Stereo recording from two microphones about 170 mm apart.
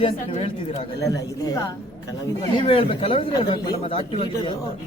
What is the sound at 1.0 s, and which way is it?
Speech, 20° left (ahead or behind).